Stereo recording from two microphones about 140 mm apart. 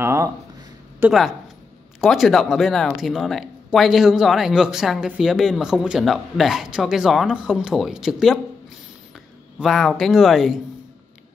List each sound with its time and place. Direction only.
0.0 s speech: 20° right (ahead or behind)
2.0 s speech: centre (ahead or behind)
9.6 s speech: centre (ahead or behind)